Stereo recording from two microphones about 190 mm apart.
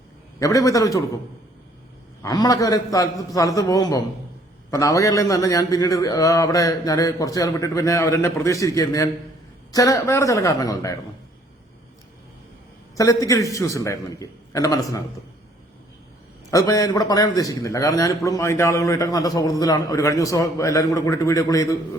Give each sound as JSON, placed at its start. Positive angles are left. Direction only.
{"t": 0.3, "sound": "a man's voice", "side_deg": 15}
{"t": 2.2, "sound": "a man's voice", "side_deg": 20}
{"t": 13.0, "sound": "a man's voice", "side_deg": 15}
{"t": 16.5, "sound": "a man's voice", "side_deg": 20}